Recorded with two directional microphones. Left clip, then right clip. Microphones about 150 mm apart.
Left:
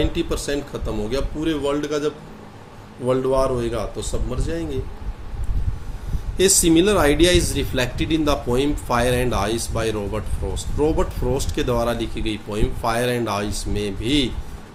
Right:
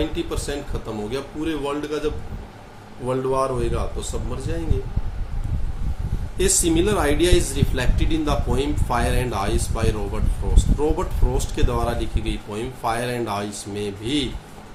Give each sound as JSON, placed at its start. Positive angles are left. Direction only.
{"t": 0.0, "sound": "speech", "side_deg": 40}
{"t": 6.3, "sound": "speech", "side_deg": 40}